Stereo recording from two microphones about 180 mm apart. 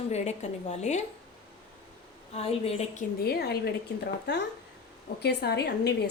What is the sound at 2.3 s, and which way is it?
Speech, 35° left (ahead or behind).